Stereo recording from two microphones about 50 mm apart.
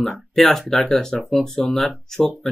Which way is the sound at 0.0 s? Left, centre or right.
Centre.